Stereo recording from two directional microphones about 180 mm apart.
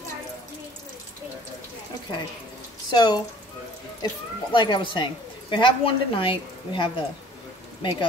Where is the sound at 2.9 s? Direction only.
25° left (ahead or behind).